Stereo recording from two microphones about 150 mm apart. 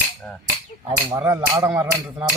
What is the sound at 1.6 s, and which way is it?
Speech, 15° right (ahead or behind).